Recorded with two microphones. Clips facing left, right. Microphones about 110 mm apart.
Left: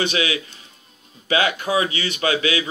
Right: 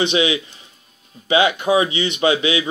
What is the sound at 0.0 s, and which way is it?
Speech, 20° right (ahead or behind).